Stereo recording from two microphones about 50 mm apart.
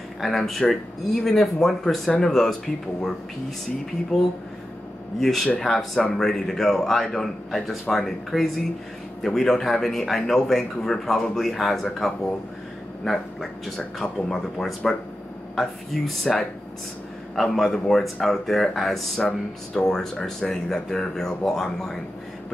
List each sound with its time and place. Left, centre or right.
0.2 s speech: centre
5.2 s speech: centre